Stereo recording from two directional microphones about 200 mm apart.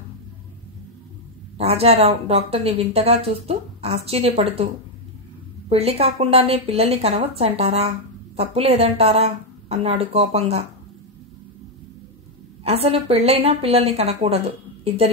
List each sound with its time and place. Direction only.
1.6 s a woman's voice: 30° right (ahead or behind)
5.7 s a woman's voice: 30° right (ahead or behind)
12.6 s speech: 30° right (ahead or behind)